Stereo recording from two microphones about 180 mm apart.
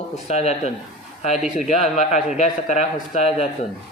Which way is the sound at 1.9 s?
40° left (ahead or behind).